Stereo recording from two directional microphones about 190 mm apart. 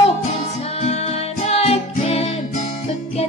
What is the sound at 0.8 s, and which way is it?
Music, 35° left (ahead or behind).